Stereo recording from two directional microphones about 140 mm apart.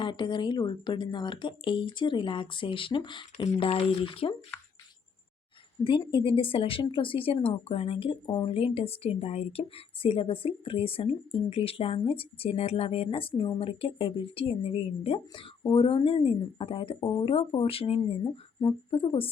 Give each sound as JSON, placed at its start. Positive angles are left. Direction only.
{"t": 0.0, "sound": "speech", "side_deg": 35}
{"t": 5.8, "sound": "speech", "side_deg": 35}